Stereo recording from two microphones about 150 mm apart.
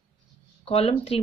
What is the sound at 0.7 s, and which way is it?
Speech, 40° left (ahead or behind).